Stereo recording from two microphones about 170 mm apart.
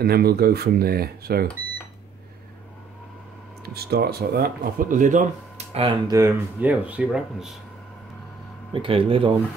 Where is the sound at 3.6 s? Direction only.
65° right (ahead or behind); by 5.9 s 40° right (ahead or behind).